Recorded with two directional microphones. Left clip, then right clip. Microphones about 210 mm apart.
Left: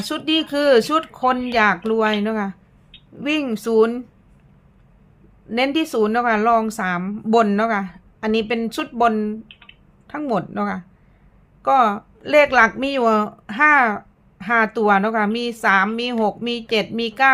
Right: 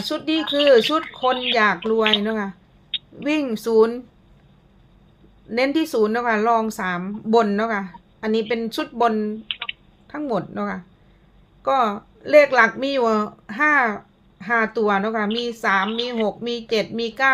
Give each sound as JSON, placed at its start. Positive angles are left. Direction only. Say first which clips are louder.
{"t": 0.0, "sound": "a woman's voice", "louder": "left 2 dB", "side_deg": 15}
{"t": 5.5, "sound": "a woman's voice", "louder": "even", "side_deg": 10}
{"t": 9.5, "sound": "a sound", "louder": "right 16 dB", "side_deg": -60}
{"t": 10.1, "sound": "a woman's voice", "louder": "left 2 dB", "side_deg": 10}